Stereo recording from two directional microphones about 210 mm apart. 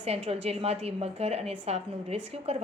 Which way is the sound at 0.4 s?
30° right (ahead or behind).